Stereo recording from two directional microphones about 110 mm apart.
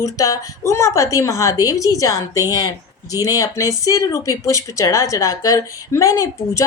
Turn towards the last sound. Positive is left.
turn(degrees=30)  # may be behind; listen again after turning